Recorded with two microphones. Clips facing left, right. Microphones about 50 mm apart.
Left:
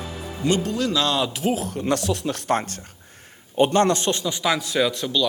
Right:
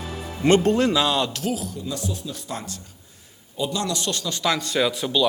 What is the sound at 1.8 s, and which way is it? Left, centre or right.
A man's voice, left.